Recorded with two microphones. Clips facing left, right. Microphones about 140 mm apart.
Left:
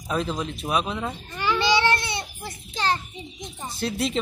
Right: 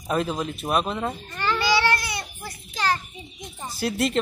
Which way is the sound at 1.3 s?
10° left (ahead or behind).